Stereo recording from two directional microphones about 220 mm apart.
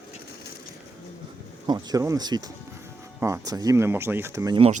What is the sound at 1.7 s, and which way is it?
Speech, 15° right (ahead or behind).